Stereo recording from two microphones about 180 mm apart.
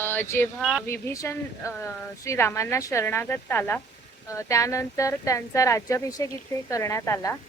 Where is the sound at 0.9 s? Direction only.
15° left (ahead or behind).